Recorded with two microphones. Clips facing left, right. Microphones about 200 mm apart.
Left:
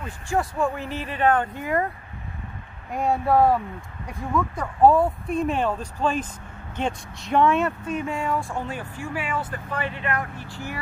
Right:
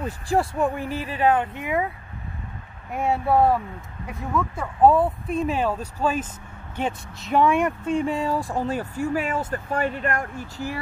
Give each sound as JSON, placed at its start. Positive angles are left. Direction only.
{"t": 0.0, "sound": "speech", "side_deg": -35}
{"t": 0.6, "sound": "speech", "side_deg": -15}
{"t": 2.9, "sound": "speech", "side_deg": -5}
{"t": 7.8, "sound": "speech", "side_deg": -30}